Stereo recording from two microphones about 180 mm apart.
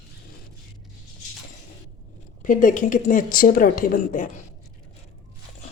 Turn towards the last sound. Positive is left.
turn(degrees=45)  # may be behind; listen again after turning